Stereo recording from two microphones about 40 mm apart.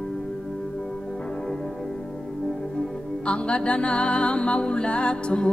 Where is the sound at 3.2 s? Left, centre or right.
Left.